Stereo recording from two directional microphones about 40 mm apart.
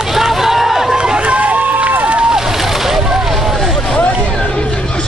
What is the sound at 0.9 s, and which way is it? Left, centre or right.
Run, centre.